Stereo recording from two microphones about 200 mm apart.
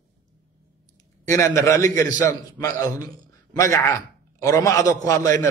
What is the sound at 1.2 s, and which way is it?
A man's voice, 15° left (ahead or behind).